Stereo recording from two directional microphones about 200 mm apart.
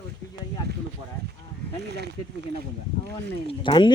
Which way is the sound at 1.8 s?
55° right (ahead or behind).